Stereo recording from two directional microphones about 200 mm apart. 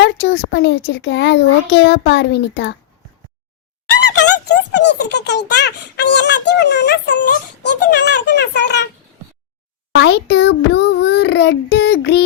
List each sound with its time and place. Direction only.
0.0 s speech: 60° left (ahead or behind)
4.0 s speech: 60° left (ahead or behind)
9.9 s speech: 60° left (ahead or behind)